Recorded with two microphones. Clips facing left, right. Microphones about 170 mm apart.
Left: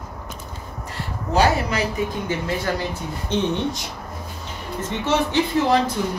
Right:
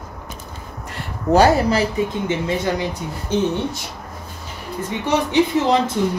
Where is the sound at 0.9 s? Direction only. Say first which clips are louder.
Right 6 dB; 40° right (ahead or behind).